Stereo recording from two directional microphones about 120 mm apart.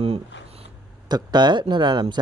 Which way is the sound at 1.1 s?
35° right (ahead or behind).